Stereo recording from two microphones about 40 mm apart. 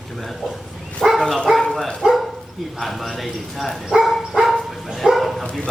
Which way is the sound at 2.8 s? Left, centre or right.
Centre.